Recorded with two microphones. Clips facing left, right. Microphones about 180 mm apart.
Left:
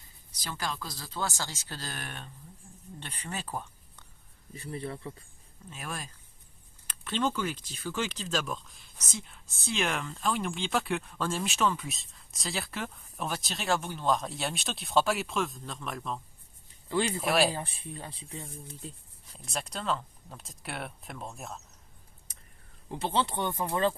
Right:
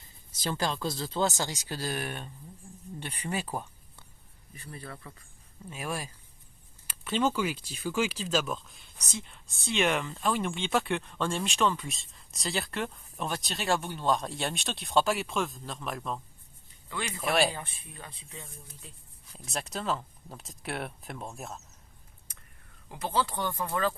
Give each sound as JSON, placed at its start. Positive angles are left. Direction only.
{"t": 0.4, "sound": "speech", "side_deg": -25}
{"t": 4.5, "sound": "speech", "side_deg": 25}
{"t": 5.7, "sound": "speech", "side_deg": -10}
{"t": 16.9, "sound": "speech", "side_deg": 30}
{"t": 17.2, "sound": "speech", "side_deg": 0}
{"t": 17.5, "sound": "speech", "side_deg": 30}
{"t": 19.5, "sound": "speech", "side_deg": 0}
{"t": 22.9, "sound": "speech", "side_deg": 30}